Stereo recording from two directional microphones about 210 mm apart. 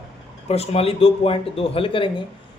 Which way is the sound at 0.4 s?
30° left (ahead or behind).